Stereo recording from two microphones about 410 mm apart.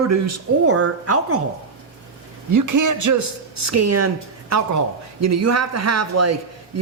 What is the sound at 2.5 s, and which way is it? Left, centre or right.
A man's voice, right.